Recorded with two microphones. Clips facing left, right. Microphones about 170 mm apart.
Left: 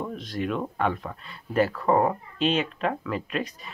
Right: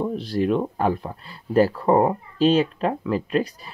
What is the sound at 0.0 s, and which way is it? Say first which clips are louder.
Speech: right 7 dB; 30° right (ahead or behind).